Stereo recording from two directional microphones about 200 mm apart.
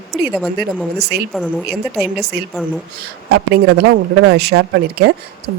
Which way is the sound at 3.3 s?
55° right (ahead or behind).